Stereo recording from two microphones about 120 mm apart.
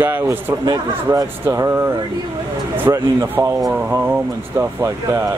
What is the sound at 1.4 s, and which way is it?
Speech, 25° right (ahead or behind).